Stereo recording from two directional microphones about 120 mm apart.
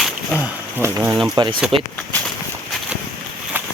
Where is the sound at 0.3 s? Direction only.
20° right (ahead or behind).